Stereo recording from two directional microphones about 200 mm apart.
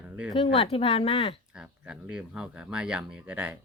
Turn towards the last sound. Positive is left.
turn(degrees=-5)  # may be behind; listen again after turning